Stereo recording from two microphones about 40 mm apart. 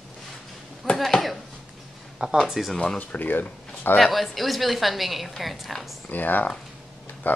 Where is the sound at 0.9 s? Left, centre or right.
Centre.